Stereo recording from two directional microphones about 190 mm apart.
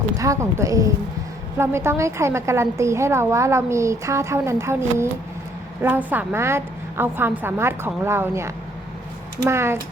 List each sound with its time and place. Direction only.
0.2 s a woman's voice: 15° right (ahead or behind)